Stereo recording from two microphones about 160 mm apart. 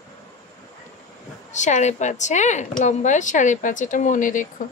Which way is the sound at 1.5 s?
50° left (ahead or behind).